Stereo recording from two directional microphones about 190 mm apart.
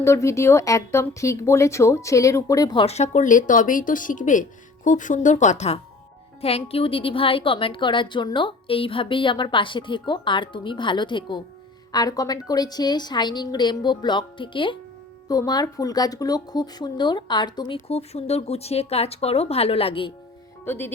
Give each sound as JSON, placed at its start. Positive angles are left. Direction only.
{"t": 0.0, "sound": "a woman's voice", "side_deg": 15}
{"t": 20.7, "sound": "speech", "side_deg": 10}